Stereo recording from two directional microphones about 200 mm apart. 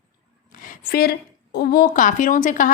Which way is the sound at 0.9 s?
50° left (ahead or behind).